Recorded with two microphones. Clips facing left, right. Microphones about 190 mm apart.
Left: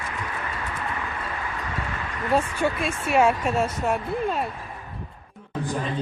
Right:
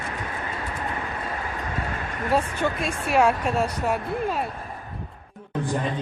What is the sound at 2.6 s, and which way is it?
Speech, centre (ahead or behind).